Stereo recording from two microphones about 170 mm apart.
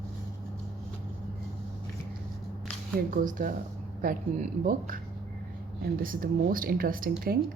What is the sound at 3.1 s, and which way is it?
Speech, 50° right (ahead or behind).